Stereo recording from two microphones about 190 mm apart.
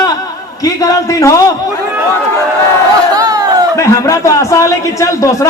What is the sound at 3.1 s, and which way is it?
Crowd, 20° right (ahead or behind).